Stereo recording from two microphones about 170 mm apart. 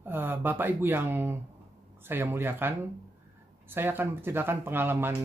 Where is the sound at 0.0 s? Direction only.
10° right (ahead or behind).